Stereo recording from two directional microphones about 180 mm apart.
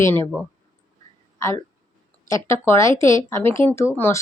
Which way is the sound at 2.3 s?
15° left (ahead or behind).